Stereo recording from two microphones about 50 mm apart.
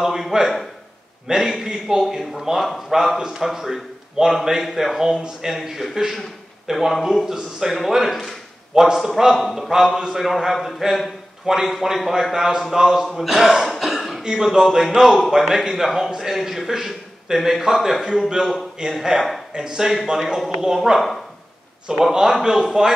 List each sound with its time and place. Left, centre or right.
0.0 s a man's voice: centre
5.5 s a man's voice: centre
7.9 s a sound: centre
8.8 s a man's voice: centre